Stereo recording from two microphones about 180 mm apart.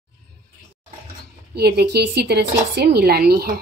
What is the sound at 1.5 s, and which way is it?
Speech, 60° right (ahead or behind).